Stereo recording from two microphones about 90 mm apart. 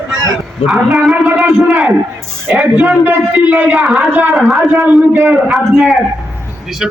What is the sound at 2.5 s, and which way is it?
A man's voice, 15° right (ahead or behind).